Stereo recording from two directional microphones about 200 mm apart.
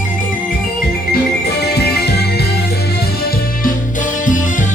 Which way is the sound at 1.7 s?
55° left (ahead or behind).